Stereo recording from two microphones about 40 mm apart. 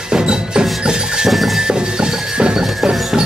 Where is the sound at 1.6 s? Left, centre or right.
Right.